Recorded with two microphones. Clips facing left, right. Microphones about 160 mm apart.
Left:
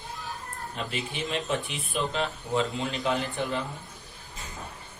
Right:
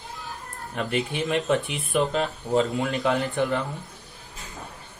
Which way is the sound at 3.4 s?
60° right (ahead or behind).